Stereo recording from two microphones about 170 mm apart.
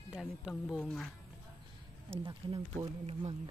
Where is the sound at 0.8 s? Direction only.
5° left (ahead or behind).